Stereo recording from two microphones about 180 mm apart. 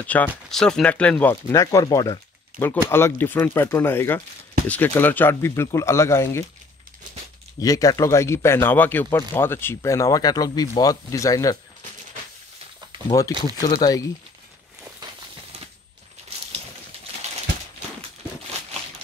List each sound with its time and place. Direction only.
0.0 s speech: 10° left (ahead or behind)
1.3 s speech: 20° left (ahead or behind)
7.5 s speech: 20° left (ahead or behind)
13.1 s speech: 20° left (ahead or behind)